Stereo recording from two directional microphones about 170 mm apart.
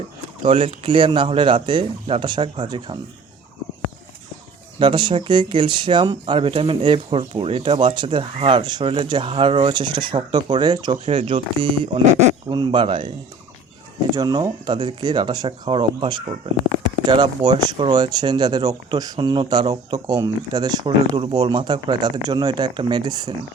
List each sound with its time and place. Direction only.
0.4 s speech: 30° right (ahead or behind)
4.8 s speech: 30° right (ahead or behind)
14.2 s speech: 20° right (ahead or behind)